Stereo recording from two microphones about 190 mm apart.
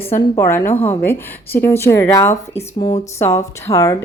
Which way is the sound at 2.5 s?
25° left (ahead or behind).